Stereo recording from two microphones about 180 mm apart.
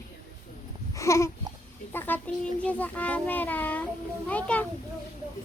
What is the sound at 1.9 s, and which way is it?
A child's voice, 10° left (ahead or behind).